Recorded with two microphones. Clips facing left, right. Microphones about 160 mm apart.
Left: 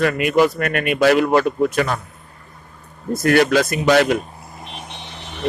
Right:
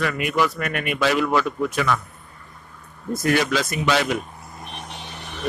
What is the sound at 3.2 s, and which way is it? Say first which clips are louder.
Speech: left 6 dB; 65° left (ahead or behind).